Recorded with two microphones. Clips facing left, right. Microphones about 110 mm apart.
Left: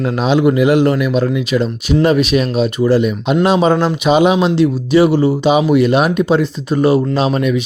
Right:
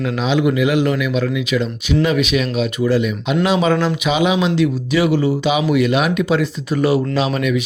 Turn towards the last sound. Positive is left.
turn(degrees=30)  # may be behind; listen again after turning